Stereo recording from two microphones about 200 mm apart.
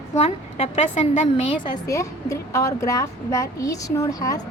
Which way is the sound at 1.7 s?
15° left (ahead or behind).